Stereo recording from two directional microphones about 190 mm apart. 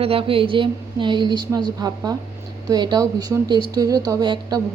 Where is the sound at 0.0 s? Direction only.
30° right (ahead or behind).